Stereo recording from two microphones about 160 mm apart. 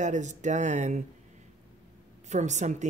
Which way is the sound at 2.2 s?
45° right (ahead or behind).